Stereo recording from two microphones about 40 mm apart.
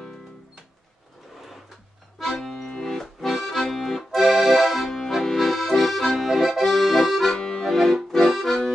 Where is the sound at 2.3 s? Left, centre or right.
Centre.